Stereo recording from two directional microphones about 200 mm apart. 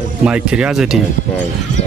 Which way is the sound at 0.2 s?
5° right (ahead or behind).